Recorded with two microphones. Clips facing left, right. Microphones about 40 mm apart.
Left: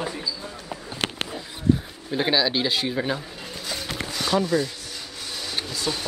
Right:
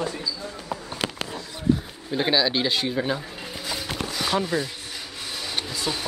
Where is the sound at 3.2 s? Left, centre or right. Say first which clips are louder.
Right 1 dB; centre.